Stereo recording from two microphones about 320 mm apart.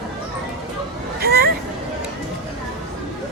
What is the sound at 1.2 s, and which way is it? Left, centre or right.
Hubbub, right.